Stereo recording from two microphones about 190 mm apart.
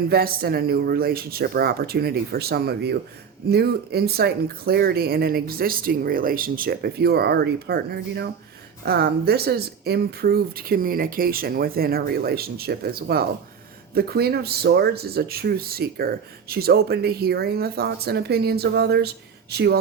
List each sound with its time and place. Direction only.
0.1 s speech: 55° right (ahead or behind)